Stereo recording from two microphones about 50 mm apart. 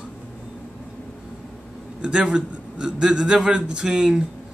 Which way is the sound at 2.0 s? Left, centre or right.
Centre.